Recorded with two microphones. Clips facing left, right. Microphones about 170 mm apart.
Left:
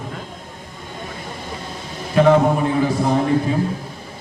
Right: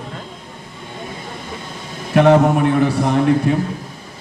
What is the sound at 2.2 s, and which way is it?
A man's voice, 70° right (ahead or behind).